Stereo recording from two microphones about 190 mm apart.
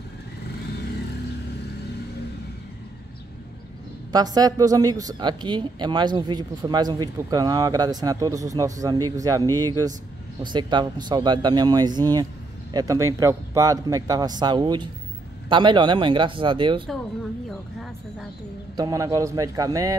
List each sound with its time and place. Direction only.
4.1 s speech: 20° right (ahead or behind)
18.8 s a man's voice: 15° right (ahead or behind)